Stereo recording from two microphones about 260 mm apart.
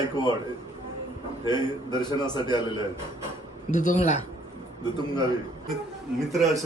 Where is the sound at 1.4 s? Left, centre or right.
Centre.